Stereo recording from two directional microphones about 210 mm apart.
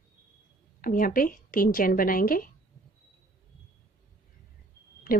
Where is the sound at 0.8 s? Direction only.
40° left (ahead or behind).